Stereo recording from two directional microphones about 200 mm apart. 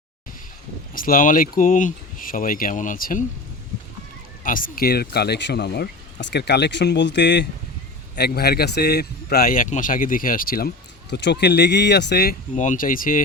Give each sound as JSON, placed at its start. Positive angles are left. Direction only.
{"t": 0.9, "sound": "speech", "side_deg": 45}
{"t": 4.4, "sound": "speech", "side_deg": 45}
{"t": 11.1, "sound": "speech", "side_deg": 60}
{"t": 12.5, "sound": "speech", "side_deg": 40}